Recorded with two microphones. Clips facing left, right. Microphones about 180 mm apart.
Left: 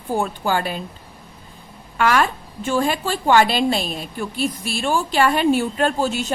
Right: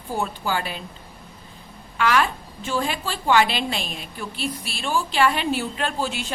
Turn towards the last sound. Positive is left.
turn(degrees=45)  # may be behind; listen again after turning